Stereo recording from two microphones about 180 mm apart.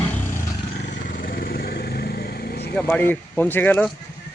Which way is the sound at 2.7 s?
10° left (ahead or behind).